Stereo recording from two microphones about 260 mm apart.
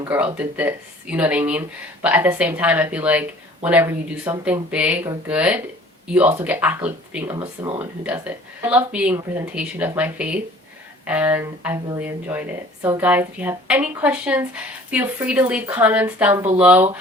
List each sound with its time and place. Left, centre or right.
0.3 s speech: centre
7.3 s speech: centre
7.8 s speech: centre